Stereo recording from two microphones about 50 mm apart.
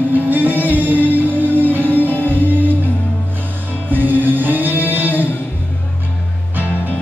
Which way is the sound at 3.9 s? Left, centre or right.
Right.